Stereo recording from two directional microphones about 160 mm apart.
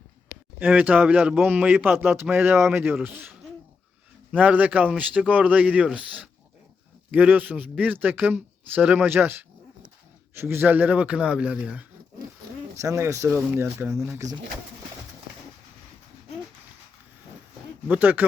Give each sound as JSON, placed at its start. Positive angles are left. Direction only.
{"t": 0.6, "sound": "a man's voice", "side_deg": -10}
{"t": 4.4, "sound": "a man's voice", "side_deg": -10}
{"t": 12.7, "sound": "a man's voice", "side_deg": -20}
{"t": 17.8, "sound": "a man's voice", "side_deg": -10}